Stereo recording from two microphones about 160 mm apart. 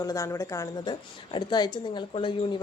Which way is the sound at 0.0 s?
20° left (ahead or behind).